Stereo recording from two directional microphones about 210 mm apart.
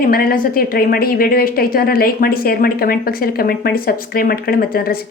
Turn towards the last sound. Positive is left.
turn(degrees=45)  # may be behind; listen again after turning